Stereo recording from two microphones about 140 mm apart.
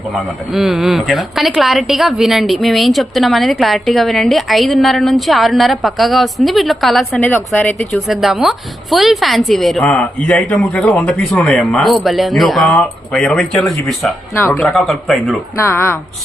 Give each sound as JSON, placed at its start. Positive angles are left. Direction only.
{"t": 0.1, "sound": "speech", "side_deg": 0}
{"t": 7.2, "sound": "speech", "side_deg": 15}
{"t": 7.9, "sound": "speech", "side_deg": 0}
{"t": 14.3, "sound": "speech", "side_deg": 15}
{"t": 14.6, "sound": "speech", "side_deg": 0}
{"t": 15.5, "sound": "speech", "side_deg": 20}